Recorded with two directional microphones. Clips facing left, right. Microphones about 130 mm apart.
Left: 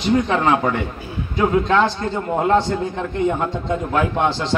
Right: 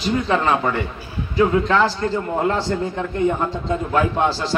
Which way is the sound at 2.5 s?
20° left (ahead or behind).